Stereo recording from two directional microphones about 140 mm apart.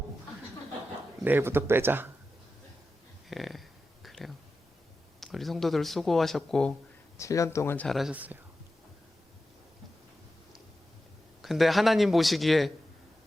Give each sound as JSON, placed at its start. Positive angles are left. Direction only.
{"t": 1.2, "sound": "speech", "side_deg": -15}
{"t": 3.2, "sound": "a sound", "side_deg": 0}
{"t": 5.2, "sound": "speech", "side_deg": 0}
{"t": 7.2, "sound": "speech", "side_deg": 20}
{"t": 7.9, "sound": "speech", "side_deg": 0}
{"t": 8.1, "sound": "speech", "side_deg": -10}
{"t": 11.4, "sound": "speech", "side_deg": 0}